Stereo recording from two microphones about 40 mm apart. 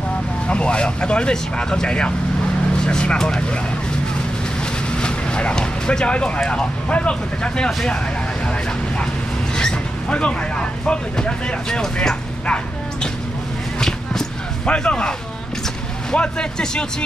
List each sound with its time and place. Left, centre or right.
0.5 s speech: left
5.0 s speech: left
9.6 s speech: left
13.7 s basketball bounce: centre
14.7 s speech: left
16.2 s speech: left